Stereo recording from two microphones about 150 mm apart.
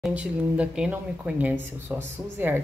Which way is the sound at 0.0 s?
10° right (ahead or behind).